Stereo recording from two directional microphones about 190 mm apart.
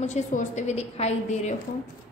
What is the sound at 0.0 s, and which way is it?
A woman's voice, 40° left (ahead or behind).